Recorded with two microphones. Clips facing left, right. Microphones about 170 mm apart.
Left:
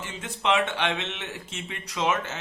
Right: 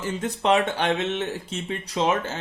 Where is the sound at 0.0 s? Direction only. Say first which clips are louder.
Right 5 dB; 40° right (ahead or behind).